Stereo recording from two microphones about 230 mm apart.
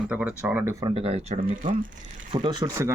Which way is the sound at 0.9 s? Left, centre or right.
Right.